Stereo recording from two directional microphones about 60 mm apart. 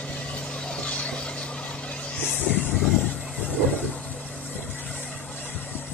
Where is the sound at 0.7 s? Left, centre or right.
Centre.